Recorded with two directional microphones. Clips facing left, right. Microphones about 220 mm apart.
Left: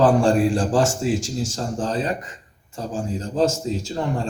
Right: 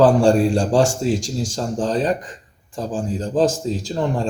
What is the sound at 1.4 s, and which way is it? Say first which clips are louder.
Speech: right 3 dB; 30° right (ahead or behind).